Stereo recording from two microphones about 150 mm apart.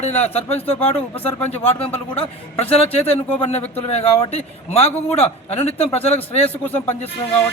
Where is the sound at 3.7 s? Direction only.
40° left (ahead or behind).